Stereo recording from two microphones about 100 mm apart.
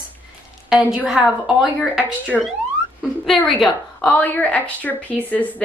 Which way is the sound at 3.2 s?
5° left (ahead or behind).